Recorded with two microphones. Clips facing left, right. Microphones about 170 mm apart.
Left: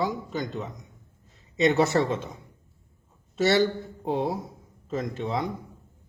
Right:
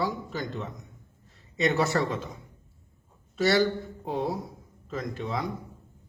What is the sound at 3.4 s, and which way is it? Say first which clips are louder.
A man's voice: left 1 dB; 25° left (ahead or behind).